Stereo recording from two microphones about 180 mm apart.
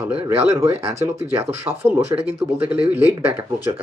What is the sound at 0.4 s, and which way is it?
Speech, 15° right (ahead or behind).